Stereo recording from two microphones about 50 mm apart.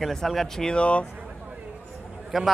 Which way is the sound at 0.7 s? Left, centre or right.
Left.